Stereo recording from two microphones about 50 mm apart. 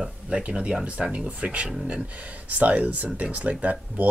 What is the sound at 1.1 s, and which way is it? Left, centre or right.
Speech, right.